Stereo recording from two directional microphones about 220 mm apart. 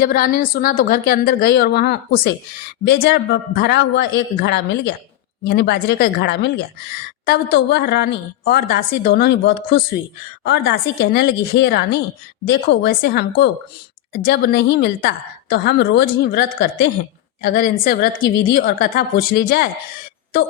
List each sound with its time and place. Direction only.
0.0 s a woman's voice: 40° left (ahead or behind)